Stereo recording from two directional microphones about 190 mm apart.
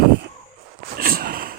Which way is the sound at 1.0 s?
50° right (ahead or behind).